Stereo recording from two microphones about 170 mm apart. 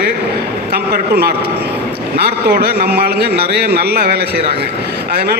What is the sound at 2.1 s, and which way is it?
A man's voice, 65° right (ahead or behind).